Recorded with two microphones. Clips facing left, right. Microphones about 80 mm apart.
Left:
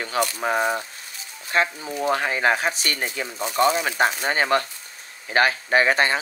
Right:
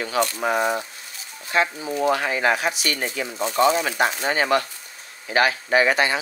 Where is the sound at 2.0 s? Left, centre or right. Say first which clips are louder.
Even; left.